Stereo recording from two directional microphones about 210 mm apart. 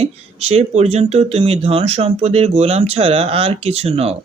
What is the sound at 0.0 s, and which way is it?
Speech, 30° right (ahead or behind).